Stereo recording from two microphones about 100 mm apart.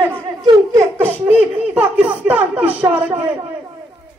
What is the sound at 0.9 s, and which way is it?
Baby laughter, 20° right (ahead or behind).